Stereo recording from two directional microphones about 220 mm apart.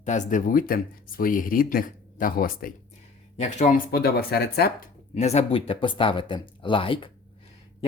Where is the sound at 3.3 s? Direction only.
30° left (ahead or behind).